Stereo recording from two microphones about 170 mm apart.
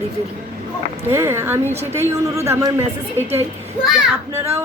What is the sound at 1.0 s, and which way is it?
Speech, 15° right (ahead or behind).